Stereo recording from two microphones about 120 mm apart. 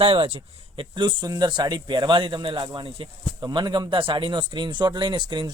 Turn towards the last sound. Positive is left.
turn(degrees=-40)  # may be behind; listen again after turning